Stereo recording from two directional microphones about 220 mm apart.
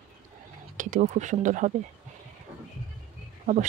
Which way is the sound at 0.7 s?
35° right (ahead or behind).